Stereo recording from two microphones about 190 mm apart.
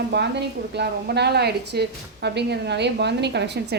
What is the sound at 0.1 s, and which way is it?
A woman's voice, 60° right (ahead or behind).